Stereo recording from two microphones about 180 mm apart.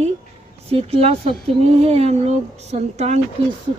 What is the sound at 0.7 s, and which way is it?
Speech, 35° right (ahead or behind).